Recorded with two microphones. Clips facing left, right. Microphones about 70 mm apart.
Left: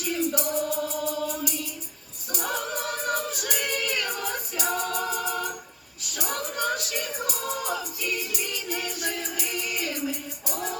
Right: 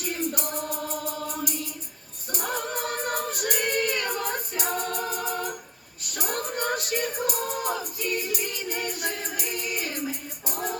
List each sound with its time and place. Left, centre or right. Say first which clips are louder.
0.0 s music: left 3 dB; right
2.3 s choir: even; right
6.1 s music: right 1 dB; right